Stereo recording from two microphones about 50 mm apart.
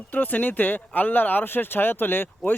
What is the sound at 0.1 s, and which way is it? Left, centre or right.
Speech, left.